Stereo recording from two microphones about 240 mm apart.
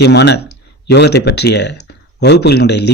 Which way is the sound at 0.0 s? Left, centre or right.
Left.